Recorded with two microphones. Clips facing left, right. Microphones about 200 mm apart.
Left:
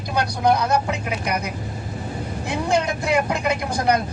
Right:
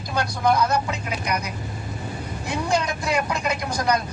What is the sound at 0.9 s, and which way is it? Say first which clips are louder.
Speech: left 2 dB; 55° left (ahead or behind).